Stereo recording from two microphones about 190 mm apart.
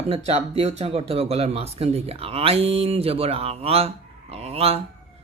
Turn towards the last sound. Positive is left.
turn(degrees=-30)  # may be behind; listen again after turning